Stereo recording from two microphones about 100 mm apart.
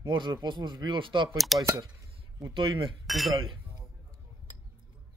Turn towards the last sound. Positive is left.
turn(degrees=0)  # may be behind; listen again after turning